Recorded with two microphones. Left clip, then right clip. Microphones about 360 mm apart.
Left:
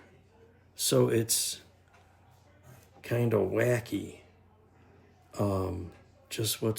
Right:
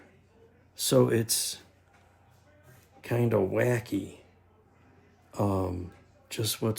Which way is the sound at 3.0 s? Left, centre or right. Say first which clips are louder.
Right 1 dB; centre.